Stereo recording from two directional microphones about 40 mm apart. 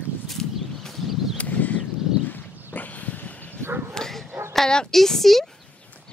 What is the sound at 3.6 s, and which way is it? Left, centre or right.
Bow-wow, right.